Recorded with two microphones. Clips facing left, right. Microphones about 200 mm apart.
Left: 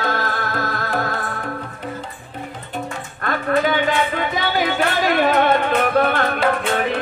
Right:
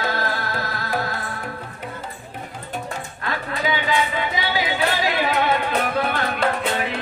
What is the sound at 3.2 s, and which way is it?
Livestock, 55° left (ahead or behind).